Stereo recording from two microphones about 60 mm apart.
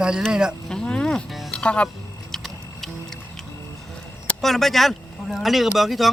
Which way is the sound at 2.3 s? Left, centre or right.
Centre.